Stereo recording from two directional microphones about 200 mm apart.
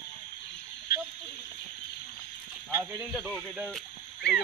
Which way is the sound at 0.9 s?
50° left (ahead or behind).